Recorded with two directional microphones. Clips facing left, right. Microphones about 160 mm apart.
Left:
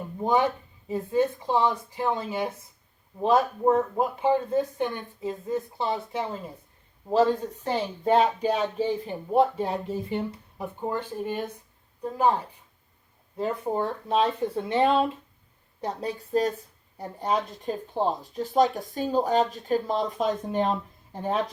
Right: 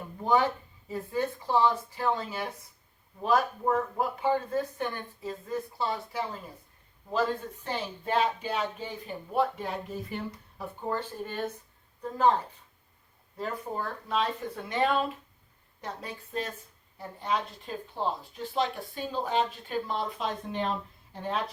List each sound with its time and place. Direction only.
0.2 s a sound: 20° left (ahead or behind)
0.9 s speech: 20° left (ahead or behind)
7.1 s speech: 35° left (ahead or behind); by 12.4 s 10° left (ahead or behind)
13.3 s speech: 25° left (ahead or behind); by 21.3 s 45° left (ahead or behind)